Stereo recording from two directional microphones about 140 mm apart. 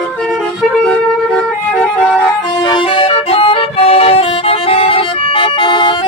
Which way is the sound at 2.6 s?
35° left (ahead or behind).